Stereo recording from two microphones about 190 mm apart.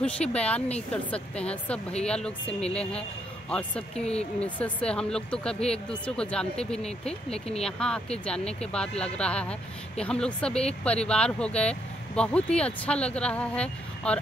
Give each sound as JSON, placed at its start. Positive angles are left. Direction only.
{"t": 0.0, "sound": "speech", "side_deg": 5}
{"t": 7.3, "sound": "speech", "side_deg": 30}
{"t": 7.6, "sound": "speech", "side_deg": 5}